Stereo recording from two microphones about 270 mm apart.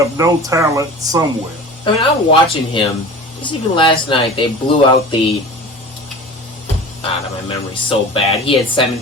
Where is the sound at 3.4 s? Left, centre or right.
Centre.